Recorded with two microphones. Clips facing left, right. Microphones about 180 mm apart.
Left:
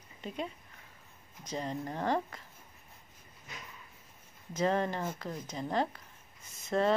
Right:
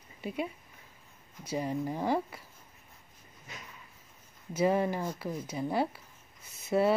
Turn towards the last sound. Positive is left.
turn(degrees=-10)  # may be behind; listen again after turning